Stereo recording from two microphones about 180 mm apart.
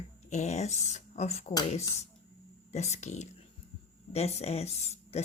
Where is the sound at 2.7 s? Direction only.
40° left (ahead or behind).